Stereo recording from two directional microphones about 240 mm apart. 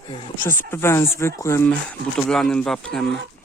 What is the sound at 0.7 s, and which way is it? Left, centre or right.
Speech, centre.